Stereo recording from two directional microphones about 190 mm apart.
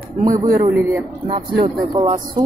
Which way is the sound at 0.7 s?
10° right (ahead or behind).